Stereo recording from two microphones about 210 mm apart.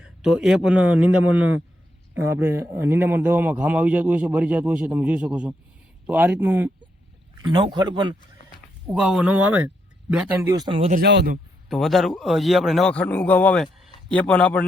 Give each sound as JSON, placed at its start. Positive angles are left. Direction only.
{"t": 0.0, "sound": "a man's voice", "side_deg": -5}
{"t": 7.4, "sound": "speech", "side_deg": -20}
{"t": 8.9, "sound": "a man's voice", "side_deg": -5}
{"t": 10.9, "sound": "speech", "side_deg": -50}
{"t": 11.7, "sound": "a man's voice", "side_deg": 0}